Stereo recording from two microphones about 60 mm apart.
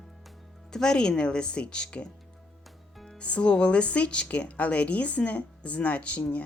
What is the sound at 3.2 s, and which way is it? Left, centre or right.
Speech, left.